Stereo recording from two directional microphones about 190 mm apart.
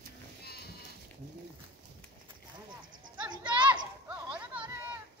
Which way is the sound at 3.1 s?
25° right (ahead or behind).